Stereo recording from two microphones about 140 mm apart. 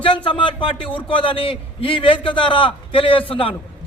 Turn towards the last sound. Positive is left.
turn(degrees=40)  # may be behind; listen again after turning